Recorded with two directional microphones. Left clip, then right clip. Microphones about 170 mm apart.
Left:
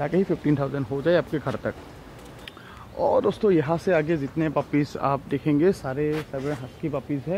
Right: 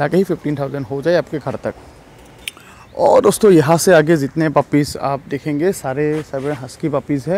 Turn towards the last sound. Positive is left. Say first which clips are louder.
# right 10 dB
turn(degrees=-40)  # may be behind; listen again after turning